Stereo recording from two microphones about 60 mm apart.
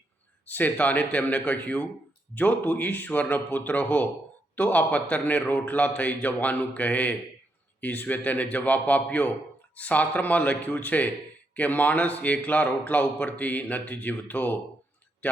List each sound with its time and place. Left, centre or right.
0.4 s a man's voice: left